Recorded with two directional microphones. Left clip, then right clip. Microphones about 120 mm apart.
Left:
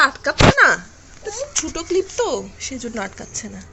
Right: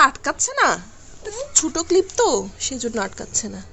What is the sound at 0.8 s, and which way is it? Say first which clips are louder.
A woman's voice: left 2 dB; 30° right (ahead or behind).